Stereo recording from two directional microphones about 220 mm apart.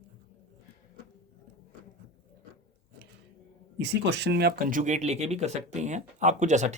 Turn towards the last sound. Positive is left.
turn(degrees=-30)  # may be behind; listen again after turning